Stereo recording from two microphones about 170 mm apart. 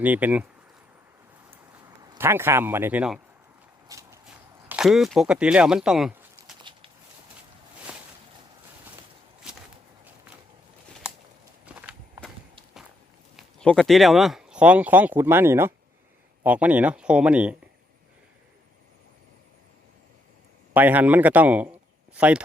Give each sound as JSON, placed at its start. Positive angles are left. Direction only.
{"t": 0.0, "sound": "speech", "side_deg": -10}
{"t": 2.1, "sound": "speech", "side_deg": -15}
{"t": 3.8, "sound": "a sound", "side_deg": -20}
{"t": 4.7, "sound": "speech", "side_deg": -5}
{"t": 6.7, "sound": "a sound", "side_deg": -30}
{"t": 7.9, "sound": "a sound", "side_deg": -5}
{"t": 11.6, "sound": "walk", "side_deg": -5}
{"t": 13.3, "sound": "speech", "side_deg": 5}
{"t": 20.7, "sound": "a man's voice", "side_deg": -10}